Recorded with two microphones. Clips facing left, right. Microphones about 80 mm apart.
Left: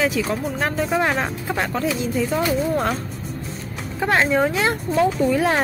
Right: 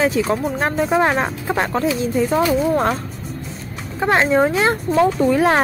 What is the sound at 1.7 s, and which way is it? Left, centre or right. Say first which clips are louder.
Speech: right 3 dB; right.